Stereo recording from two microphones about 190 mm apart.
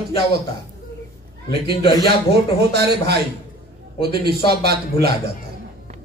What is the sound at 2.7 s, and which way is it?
Speech, 55° right (ahead or behind).